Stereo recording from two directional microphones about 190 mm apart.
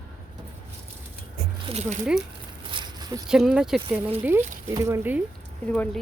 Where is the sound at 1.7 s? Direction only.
35° right (ahead or behind).